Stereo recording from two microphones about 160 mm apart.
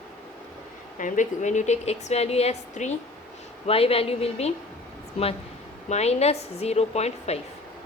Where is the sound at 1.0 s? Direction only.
50° left (ahead or behind).